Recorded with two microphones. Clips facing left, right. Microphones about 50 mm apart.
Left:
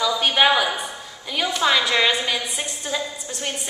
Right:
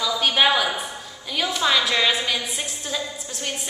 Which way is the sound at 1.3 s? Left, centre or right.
Centre.